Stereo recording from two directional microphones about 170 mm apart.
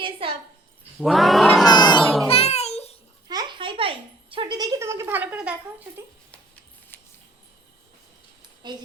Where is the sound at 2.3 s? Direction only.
35° left (ahead or behind).